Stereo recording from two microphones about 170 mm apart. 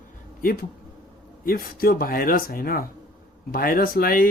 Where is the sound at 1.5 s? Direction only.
60° left (ahead or behind).